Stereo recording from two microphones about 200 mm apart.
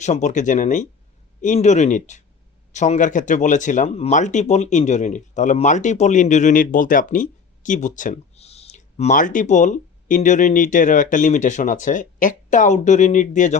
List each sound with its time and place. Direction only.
0.0 s speech: 35° left (ahead or behind)